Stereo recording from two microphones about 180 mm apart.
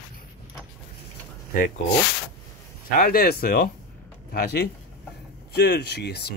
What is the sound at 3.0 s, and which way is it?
Speech, 55° left (ahead or behind).